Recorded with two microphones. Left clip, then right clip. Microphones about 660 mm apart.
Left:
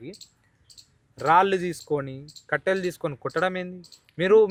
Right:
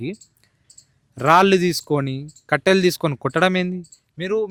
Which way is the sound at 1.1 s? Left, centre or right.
Right.